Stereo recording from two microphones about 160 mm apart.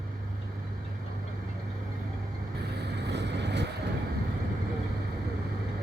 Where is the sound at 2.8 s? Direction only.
90° right.